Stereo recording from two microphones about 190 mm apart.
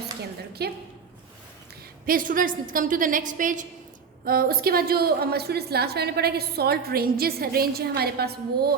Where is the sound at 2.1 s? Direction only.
45° right (ahead or behind).